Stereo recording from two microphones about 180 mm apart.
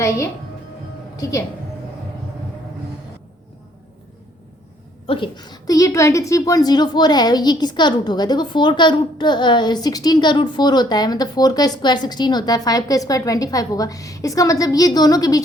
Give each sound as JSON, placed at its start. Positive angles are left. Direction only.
{"t": 1.1, "sound": "a woman's voice", "side_deg": 20}
{"t": 5.0, "sound": "a woman's voice", "side_deg": 30}